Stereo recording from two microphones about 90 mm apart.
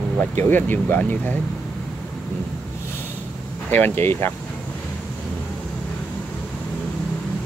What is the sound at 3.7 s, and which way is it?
Speech, 25° left (ahead or behind).